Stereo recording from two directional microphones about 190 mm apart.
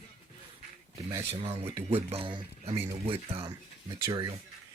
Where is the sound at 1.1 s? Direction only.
25° right (ahead or behind).